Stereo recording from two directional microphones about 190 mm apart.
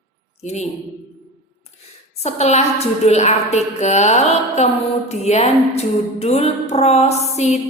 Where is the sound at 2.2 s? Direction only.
35° left (ahead or behind).